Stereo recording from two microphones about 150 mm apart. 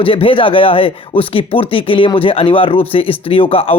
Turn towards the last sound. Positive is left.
turn(degrees=40)  # may be behind; listen again after turning